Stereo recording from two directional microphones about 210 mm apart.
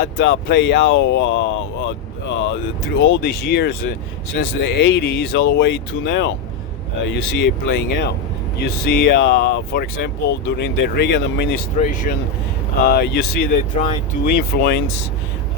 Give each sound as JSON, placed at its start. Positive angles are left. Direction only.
{"t": 0.0, "sound": "speech", "side_deg": 55}
{"t": 11.8, "sound": "speech", "side_deg": 35}
{"t": 12.8, "sound": "speech", "side_deg": 50}